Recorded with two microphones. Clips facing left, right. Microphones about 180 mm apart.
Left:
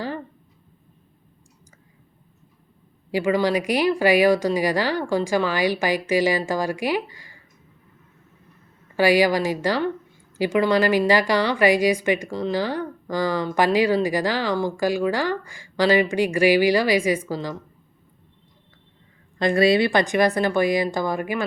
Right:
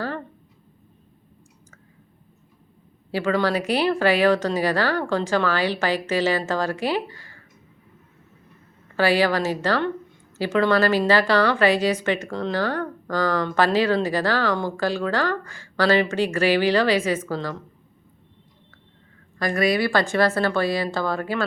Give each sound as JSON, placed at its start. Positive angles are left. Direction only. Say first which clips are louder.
{"t": 3.1, "sound": "speech", "louder": "left 2 dB", "side_deg": 15}
{"t": 9.0, "sound": "speech", "louder": "left 2 dB", "side_deg": 15}
{"t": 19.4, "sound": "speech", "louder": "left 4 dB", "side_deg": 25}